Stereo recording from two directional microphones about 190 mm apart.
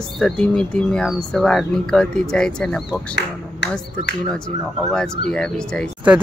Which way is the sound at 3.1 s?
65° left (ahead or behind).